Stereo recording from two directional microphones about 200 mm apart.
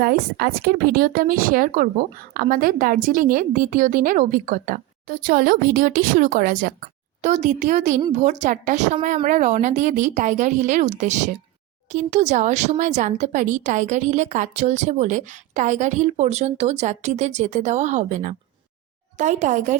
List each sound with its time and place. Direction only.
0.0 s speech: 50° right (ahead or behind)